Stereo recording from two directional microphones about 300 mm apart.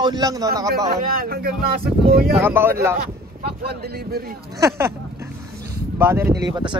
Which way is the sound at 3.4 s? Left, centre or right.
Right.